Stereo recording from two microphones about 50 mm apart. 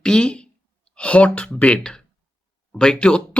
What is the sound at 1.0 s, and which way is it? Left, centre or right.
Speech, left.